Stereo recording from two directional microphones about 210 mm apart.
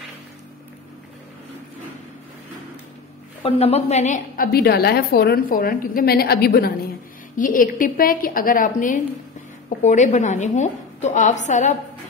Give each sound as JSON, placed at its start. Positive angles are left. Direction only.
{"t": 3.4, "sound": "a woman's voice", "side_deg": 30}